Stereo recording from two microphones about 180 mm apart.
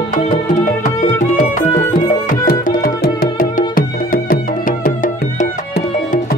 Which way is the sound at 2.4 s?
50° left (ahead or behind).